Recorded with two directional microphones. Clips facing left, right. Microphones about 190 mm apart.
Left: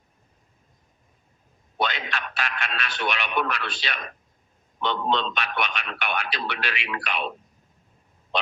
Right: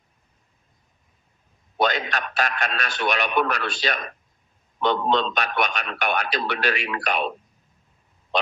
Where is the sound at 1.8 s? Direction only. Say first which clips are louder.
Right 5 dB; 45° right (ahead or behind).